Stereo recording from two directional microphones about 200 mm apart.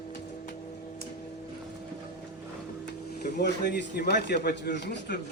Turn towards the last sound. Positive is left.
turn(degrees=55)  # may be behind; listen again after turning